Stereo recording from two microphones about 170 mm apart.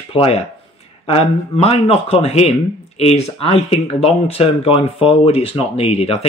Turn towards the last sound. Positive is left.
turn(degrees=35)  # may be behind; listen again after turning